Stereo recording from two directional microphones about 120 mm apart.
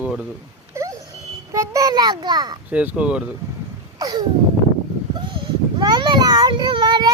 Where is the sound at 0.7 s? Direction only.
25° right (ahead or behind).